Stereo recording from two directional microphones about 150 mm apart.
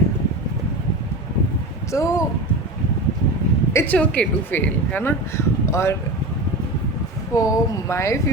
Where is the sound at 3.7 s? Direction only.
20° left (ahead or behind).